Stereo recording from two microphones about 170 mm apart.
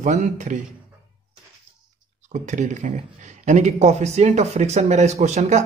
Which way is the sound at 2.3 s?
45° right (ahead or behind).